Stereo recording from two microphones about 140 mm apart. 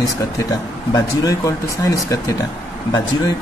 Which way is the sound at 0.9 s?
25° left (ahead or behind).